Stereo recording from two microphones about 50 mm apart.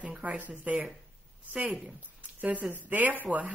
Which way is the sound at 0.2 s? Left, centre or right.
Right.